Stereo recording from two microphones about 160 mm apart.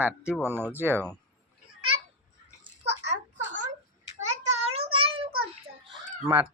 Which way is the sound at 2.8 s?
90° right.